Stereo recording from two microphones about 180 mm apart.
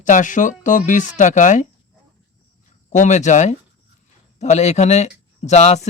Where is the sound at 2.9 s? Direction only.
40° left (ahead or behind).